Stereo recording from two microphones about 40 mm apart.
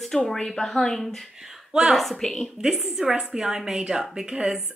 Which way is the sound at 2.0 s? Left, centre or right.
Centre.